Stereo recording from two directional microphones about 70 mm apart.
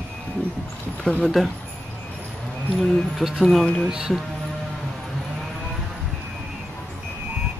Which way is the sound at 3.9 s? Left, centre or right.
Centre.